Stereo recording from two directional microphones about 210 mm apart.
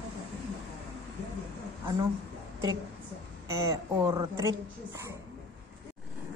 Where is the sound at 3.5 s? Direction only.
15° right (ahead or behind).